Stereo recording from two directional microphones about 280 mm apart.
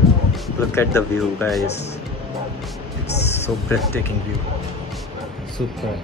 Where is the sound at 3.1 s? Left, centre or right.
Left.